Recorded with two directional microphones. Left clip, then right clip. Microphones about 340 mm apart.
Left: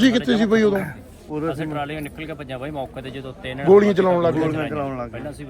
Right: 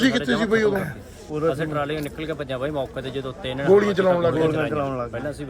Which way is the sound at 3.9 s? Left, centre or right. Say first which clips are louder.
Left 1 dB; left.